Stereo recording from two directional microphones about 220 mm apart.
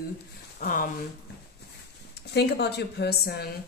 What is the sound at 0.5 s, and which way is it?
Speech, 40° left (ahead or behind).